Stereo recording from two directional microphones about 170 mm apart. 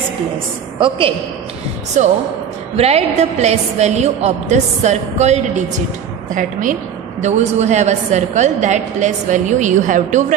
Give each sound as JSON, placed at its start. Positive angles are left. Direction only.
{"t": 0.7, "sound": "a woman's voice", "side_deg": -30}
{"t": 2.0, "sound": "a woman's voice", "side_deg": -45}